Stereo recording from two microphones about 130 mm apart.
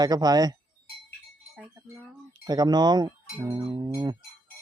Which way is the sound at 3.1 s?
15° right (ahead or behind).